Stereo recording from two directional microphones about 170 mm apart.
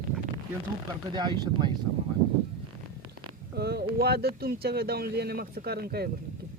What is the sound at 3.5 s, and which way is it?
Speech, 70° right (ahead or behind).